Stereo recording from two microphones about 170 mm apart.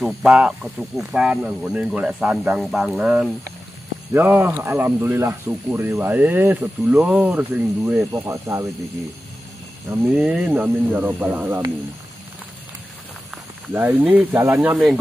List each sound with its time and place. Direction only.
0.0 s speech: 5° right (ahead or behind)
8.1 s speech: 20° right (ahead or behind)
10.0 s speech: centre (ahead or behind)
13.8 s speech: 5° right (ahead or behind)